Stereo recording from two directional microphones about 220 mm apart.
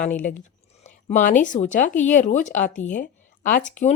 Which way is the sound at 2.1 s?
35° left (ahead or behind).